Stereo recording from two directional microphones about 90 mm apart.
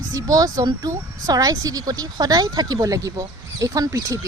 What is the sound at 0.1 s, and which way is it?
Speech, 40° right (ahead or behind).